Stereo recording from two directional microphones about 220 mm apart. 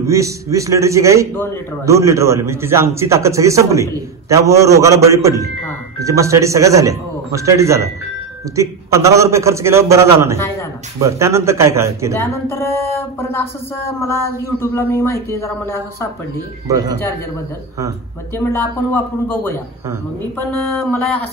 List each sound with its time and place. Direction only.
0.0 s a man's voice: 15° right (ahead or behind)
12.2 s speech: 10° left (ahead or behind)
18.4 s speech: 10° left (ahead or behind)